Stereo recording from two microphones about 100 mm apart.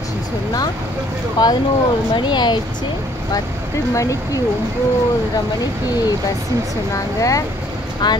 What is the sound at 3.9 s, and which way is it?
Speech, 35° left (ahead or behind).